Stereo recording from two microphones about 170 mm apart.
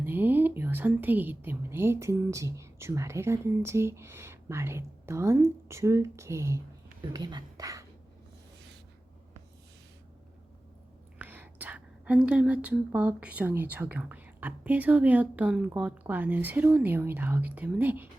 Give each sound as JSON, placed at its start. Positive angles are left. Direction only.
{"t": 0.0, "sound": "speech", "side_deg": -10}
{"t": 11.2, "sound": "speech", "side_deg": -10}